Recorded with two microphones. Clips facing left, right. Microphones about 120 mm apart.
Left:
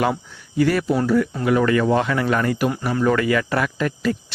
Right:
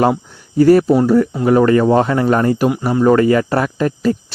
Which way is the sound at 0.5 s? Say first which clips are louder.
Right 9 dB; 40° right (ahead or behind).